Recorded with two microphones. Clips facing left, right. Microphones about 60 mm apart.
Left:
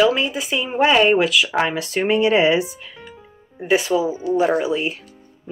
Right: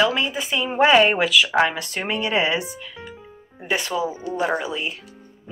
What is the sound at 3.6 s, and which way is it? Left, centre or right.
Speech, centre.